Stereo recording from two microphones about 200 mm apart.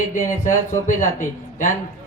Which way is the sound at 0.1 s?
40° left (ahead or behind).